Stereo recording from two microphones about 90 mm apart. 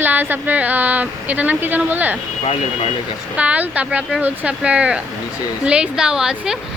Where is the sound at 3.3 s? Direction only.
15° right (ahead or behind).